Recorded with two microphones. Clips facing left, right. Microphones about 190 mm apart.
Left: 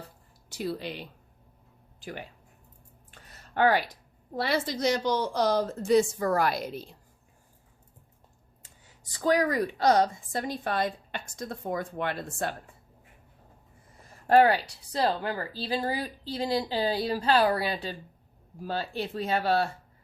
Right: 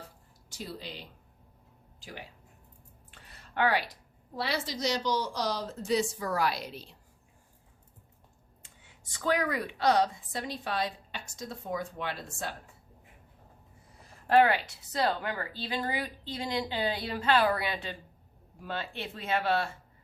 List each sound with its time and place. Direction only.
0.5 s speech: 65° left (ahead or behind)
3.1 s a sound: 45° left (ahead or behind)
4.4 s speech: 50° left (ahead or behind)
8.6 s speech: 40° left (ahead or behind); by 12.5 s 55° left (ahead or behind)
14.3 s speech: 35° left (ahead or behind)